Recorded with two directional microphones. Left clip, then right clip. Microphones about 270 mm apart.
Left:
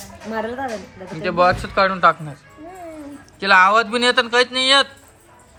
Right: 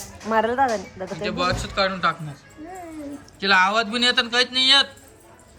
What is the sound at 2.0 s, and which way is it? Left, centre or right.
Speech, centre.